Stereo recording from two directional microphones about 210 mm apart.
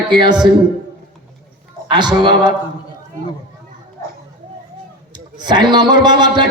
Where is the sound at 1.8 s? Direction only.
20° right (ahead or behind).